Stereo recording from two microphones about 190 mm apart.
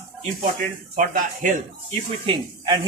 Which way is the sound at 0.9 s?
45° right (ahead or behind).